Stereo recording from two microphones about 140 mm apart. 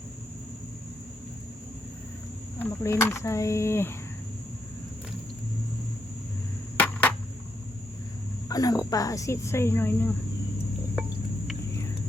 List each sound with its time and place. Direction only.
2.6 s speech: 15° left (ahead or behind)
6.7 s a sound: 10° left (ahead or behind)
8.4 s speech: 25° left (ahead or behind)